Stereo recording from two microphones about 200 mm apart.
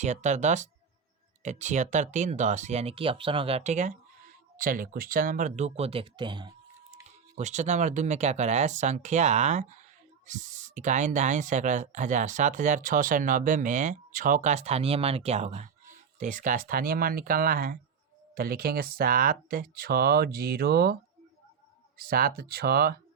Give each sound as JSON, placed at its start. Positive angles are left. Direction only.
{"t": 0.0, "sound": "speech", "side_deg": -35}
{"t": 7.3, "sound": "speech", "side_deg": -35}